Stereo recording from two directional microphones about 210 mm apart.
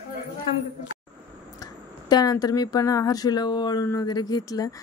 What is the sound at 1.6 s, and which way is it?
Speech, 20° left (ahead or behind).